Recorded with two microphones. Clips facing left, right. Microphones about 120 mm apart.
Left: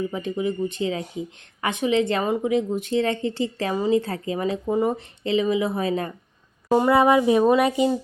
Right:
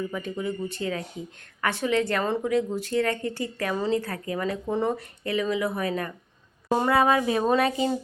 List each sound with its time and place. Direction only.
0.1 s speech: 20° left (ahead or behind)